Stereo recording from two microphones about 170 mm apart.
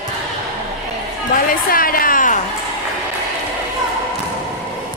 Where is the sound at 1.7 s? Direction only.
55° left (ahead or behind).